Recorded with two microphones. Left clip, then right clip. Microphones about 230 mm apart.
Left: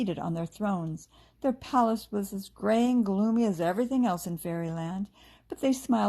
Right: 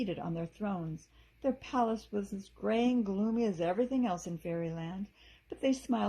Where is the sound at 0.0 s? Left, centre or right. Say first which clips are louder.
Left 5 dB; left.